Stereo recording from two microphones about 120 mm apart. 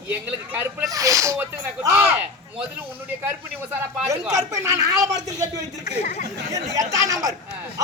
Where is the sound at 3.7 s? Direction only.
20° right (ahead or behind).